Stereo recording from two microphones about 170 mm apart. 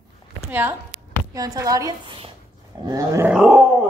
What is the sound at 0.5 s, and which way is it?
A woman's voice, 15° right (ahead or behind).